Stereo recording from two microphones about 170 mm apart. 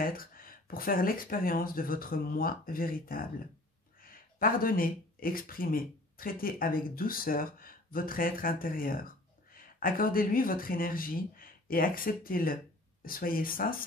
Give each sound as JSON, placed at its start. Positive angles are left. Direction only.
{"t": 0.0, "sound": "speech", "side_deg": 55}